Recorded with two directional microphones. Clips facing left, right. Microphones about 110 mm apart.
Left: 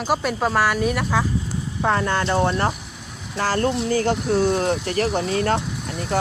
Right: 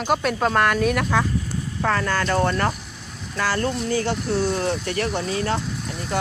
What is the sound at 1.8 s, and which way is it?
Speech, 20° left (ahead or behind).